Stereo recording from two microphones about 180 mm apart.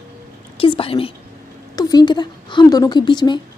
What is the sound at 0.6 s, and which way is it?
A woman's voice, 30° left (ahead or behind).